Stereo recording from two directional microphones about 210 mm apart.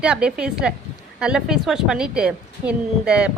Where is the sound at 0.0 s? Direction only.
5° right (ahead or behind).